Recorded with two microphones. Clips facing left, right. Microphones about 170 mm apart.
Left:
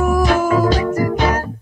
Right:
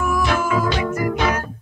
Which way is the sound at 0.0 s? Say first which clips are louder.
Left 5 dB; 40° left (ahead or behind).